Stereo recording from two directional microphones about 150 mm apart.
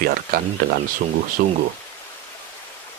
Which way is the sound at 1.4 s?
80° right.